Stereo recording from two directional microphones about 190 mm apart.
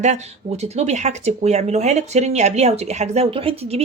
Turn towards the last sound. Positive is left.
turn(degrees=-30)  # may be behind; listen again after turning